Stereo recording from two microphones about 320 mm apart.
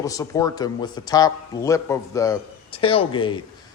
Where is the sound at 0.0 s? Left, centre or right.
Centre.